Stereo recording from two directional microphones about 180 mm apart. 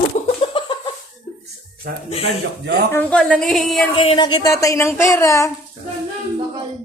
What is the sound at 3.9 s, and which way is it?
A woman's voice, 30° left (ahead or behind).